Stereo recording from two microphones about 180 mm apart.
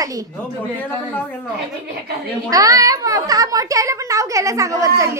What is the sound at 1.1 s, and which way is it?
Speech, 10° left (ahead or behind).